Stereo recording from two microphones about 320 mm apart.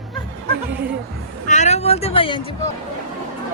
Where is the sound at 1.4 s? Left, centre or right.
Left.